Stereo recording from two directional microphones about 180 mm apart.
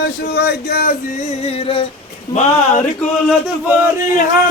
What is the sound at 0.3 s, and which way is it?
Speech, 60° left (ahead or behind).